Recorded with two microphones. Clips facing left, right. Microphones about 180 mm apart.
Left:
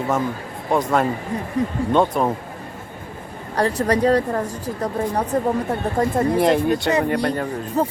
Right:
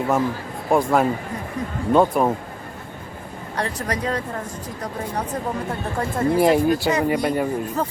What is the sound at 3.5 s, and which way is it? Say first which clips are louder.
Speech: left 7 dB; 35° left (ahead or behind).